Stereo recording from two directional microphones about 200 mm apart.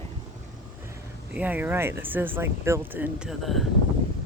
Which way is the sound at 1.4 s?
10° right (ahead or behind).